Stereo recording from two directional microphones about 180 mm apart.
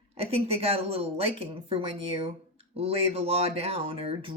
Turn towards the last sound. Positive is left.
turn(degrees=-30)  # may be behind; listen again after turning